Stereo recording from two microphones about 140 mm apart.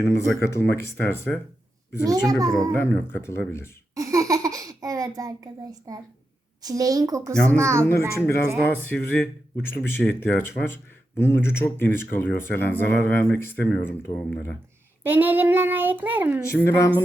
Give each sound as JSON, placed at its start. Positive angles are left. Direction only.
{"t": 0.0, "sound": "speech", "side_deg": 20}
{"t": 2.0, "sound": "a woman's voice", "side_deg": -25}
{"t": 2.7, "sound": "speech", "side_deg": 15}
{"t": 3.9, "sound": "baby laughter", "side_deg": -25}
{"t": 5.9, "sound": "a woman's voice", "side_deg": -25}
{"t": 8.7, "sound": "speech", "side_deg": 15}
{"t": 15.0, "sound": "a child's voice", "side_deg": -15}
{"t": 16.4, "sound": "speech", "side_deg": 20}